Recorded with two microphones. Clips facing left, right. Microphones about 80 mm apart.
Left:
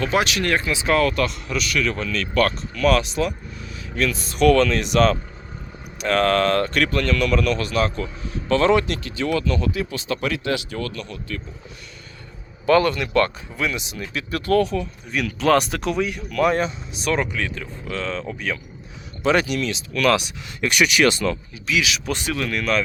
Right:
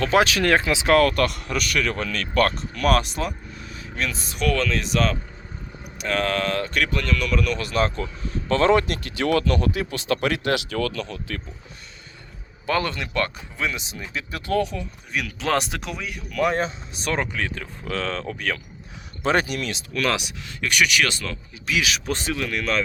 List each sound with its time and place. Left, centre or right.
0.6 s speech: right
0.9 s speech: right
3.9 s speech: right
4.4 s speech: centre
7.6 s speech: right
9.0 s speech: right
12.6 s speech: right; by 15.4 s centre
15.4 s speech: right
15.8 s speech: centre
16.9 s speech: right
17.8 s speech: right
19.2 s speech: right
20.6 s speech: left
21.7 s speech: right